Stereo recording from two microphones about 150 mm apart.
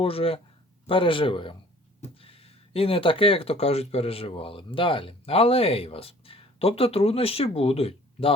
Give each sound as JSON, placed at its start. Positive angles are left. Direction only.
{"t": 0.0, "sound": "speech", "side_deg": 40}